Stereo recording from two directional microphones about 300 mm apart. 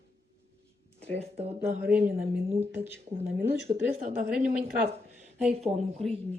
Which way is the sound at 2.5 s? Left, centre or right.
Centre.